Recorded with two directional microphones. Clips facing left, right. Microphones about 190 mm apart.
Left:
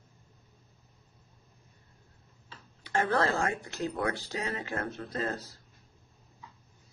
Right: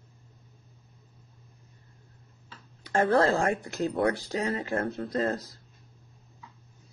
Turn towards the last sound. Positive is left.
turn(degrees=-30)  # may be behind; listen again after turning